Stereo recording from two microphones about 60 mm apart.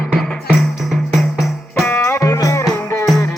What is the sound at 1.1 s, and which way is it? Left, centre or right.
Music, centre.